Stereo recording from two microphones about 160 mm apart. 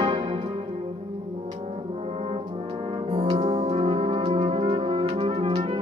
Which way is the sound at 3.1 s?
35° right (ahead or behind).